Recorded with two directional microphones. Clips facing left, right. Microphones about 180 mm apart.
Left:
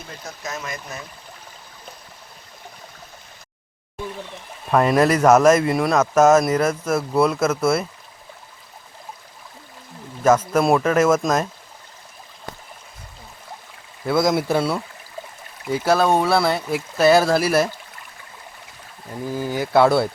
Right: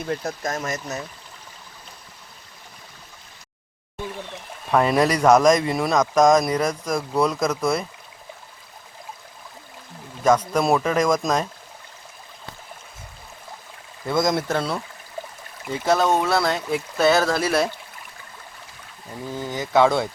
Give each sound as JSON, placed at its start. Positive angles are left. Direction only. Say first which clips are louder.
{"t": 0.1, "sound": "speech", "louder": "right 6 dB", "side_deg": -55}
{"t": 4.7, "sound": "speech", "louder": "left 2 dB", "side_deg": 0}
{"t": 10.2, "sound": "speech", "louder": "left 2 dB", "side_deg": 5}
{"t": 14.1, "sound": "speech", "louder": "left 3 dB", "side_deg": 5}
{"t": 19.3, "sound": "speech", "louder": "left 3 dB", "side_deg": 10}